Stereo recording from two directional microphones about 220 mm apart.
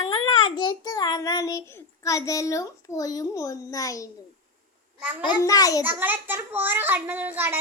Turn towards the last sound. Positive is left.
turn(degrees=-10)  # may be behind; listen again after turning